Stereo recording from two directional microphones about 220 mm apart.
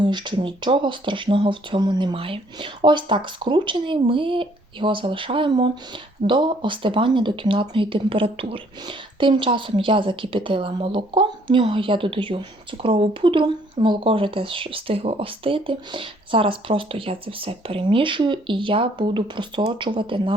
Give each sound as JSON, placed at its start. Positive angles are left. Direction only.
{"t": 0.0, "sound": "speech", "side_deg": -20}